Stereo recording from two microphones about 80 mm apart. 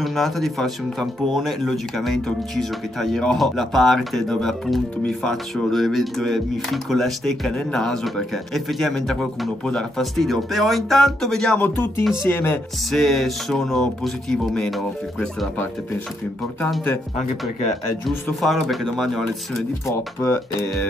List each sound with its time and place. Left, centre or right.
0.0 s speech: centre
11.5 s speech: left
12.9 s speech: centre
18.0 s speech: centre
20.2 s speech: left